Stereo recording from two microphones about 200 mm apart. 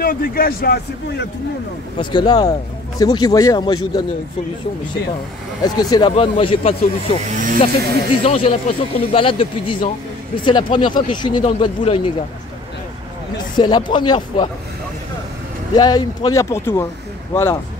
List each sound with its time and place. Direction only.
0.0 s speech: 45° left (ahead or behind)
2.0 s speech: 20° left (ahead or behind)
5.6 s speech: 20° left (ahead or behind)
7.2 s speech: 40° right (ahead or behind)
8.2 s speech: 30° left (ahead or behind)
13.6 s speech: 20° left (ahead or behind)
15.7 s speech: 20° left (ahead or behind)